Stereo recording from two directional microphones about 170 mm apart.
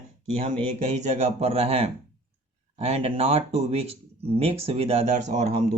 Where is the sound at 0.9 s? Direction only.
40° right (ahead or behind).